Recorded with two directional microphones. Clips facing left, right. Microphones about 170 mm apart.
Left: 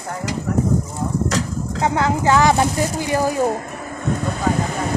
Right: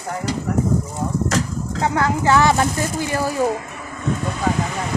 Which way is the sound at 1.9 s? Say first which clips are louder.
Even; 20° left (ahead or behind).